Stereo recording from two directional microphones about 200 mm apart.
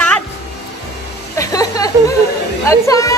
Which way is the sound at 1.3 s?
15° left (ahead or behind).